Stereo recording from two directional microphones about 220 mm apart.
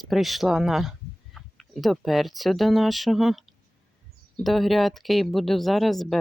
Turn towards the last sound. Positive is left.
turn(degrees=0)  # may be behind; listen again after turning